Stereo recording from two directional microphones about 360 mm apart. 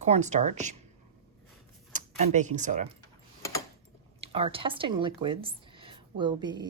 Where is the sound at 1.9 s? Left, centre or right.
Centre.